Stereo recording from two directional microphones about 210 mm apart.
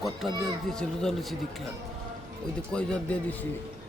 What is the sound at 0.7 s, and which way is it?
Speech, centre (ahead or behind).